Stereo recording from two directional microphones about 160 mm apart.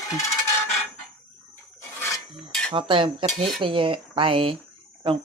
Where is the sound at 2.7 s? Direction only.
30° right (ahead or behind).